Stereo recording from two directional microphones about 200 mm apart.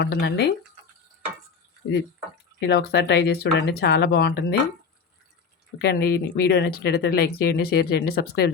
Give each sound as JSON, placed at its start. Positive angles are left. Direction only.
{"t": 0.0, "sound": "speech", "side_deg": 55}
{"t": 2.6, "sound": "speech", "side_deg": 55}
{"t": 5.8, "sound": "speech", "side_deg": 50}